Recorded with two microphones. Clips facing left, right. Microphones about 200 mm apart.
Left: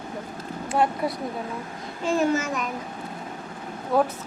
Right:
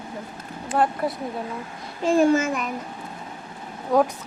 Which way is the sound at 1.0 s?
Centre (ahead or behind).